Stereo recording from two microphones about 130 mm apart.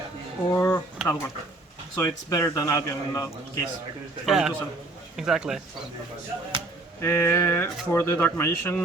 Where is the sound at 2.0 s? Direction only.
25° left (ahead or behind).